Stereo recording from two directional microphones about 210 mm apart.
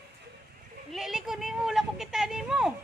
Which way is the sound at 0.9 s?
Centre (ahead or behind).